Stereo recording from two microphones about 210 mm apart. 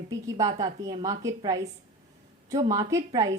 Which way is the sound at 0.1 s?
15° right (ahead or behind).